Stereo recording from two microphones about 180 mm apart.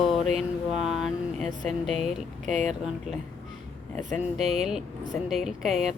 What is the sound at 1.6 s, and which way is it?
Speech, centre (ahead or behind).